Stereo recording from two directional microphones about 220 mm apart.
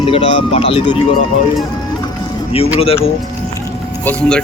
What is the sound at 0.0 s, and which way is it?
Speech, 25° left (ahead or behind).